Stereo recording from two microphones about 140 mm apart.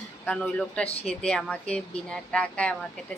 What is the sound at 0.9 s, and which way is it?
Speech, 45° left (ahead or behind).